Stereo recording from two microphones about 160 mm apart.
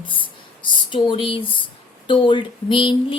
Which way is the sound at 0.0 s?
30° left (ahead or behind).